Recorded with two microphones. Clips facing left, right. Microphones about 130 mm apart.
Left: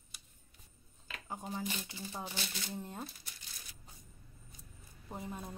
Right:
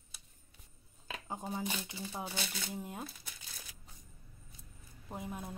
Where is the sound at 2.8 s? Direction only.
5° right (ahead or behind).